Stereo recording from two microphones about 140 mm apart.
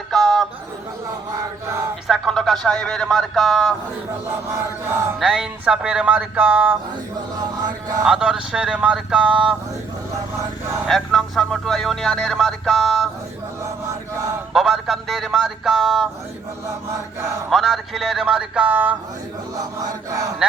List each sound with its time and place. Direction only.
0.1 s a sound: centre (ahead or behind)
2.0 s a man's voice: centre (ahead or behind)
5.2 s speech: 5° right (ahead or behind)
8.0 s a man's voice: 5° right (ahead or behind)
10.8 s speech: centre (ahead or behind)
14.5 s speech: 5° right (ahead or behind)
17.5 s a man's voice: centre (ahead or behind)
19.5 s chant: 25° right (ahead or behind)